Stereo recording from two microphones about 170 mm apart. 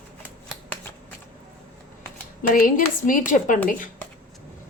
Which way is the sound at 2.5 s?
55° left (ahead or behind).